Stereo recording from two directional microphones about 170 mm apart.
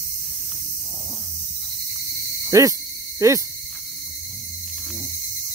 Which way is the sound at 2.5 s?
20° right (ahead or behind).